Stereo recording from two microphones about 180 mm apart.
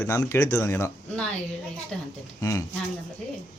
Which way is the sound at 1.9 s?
5° left (ahead or behind).